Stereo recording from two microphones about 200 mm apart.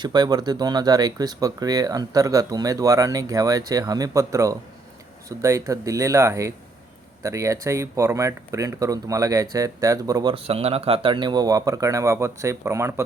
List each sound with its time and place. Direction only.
0.0 s speech: 20° right (ahead or behind)